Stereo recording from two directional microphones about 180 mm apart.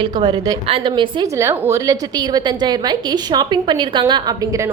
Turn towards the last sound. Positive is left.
turn(degrees=-20)  # may be behind; listen again after turning